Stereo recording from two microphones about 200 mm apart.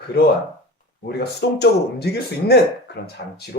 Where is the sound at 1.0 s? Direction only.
55° left (ahead or behind).